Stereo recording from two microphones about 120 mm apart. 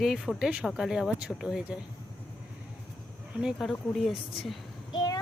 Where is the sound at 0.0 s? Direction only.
Centre (ahead or behind).